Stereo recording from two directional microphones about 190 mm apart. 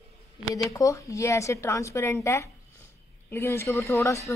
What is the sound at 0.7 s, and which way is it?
Speech, 15° left (ahead or behind).